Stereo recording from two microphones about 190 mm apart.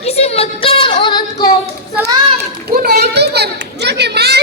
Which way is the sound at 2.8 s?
55° right (ahead or behind).